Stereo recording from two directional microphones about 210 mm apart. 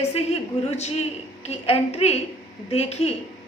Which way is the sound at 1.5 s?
30° left (ahead or behind).